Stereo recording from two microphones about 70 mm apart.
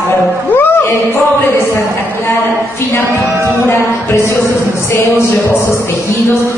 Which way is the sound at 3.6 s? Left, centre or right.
Left.